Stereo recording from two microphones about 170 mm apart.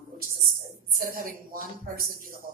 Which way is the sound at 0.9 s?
55° right (ahead or behind).